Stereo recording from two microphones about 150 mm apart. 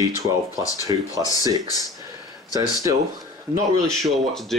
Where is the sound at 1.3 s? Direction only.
25° left (ahead or behind).